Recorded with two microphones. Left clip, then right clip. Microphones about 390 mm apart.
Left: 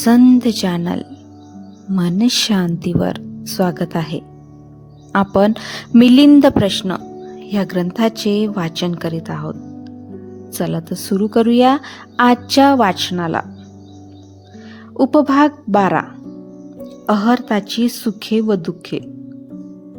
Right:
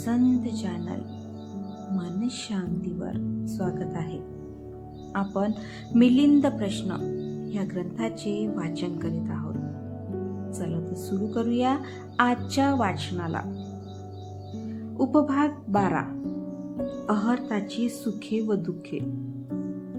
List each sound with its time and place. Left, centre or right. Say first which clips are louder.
0.0 s speech: left 14 dB; left
2.0 s speech: left 18 dB; left
10.6 s speech: left 12 dB; left
14.9 s speech: left 11 dB; left
17.1 s speech: left 13 dB; left